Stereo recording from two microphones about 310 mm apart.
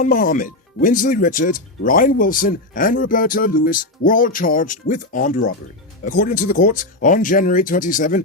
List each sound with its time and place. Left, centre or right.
0.0 s speech: left